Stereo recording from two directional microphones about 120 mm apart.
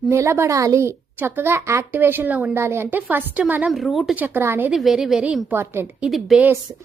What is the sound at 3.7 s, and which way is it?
Speech, centre (ahead or behind).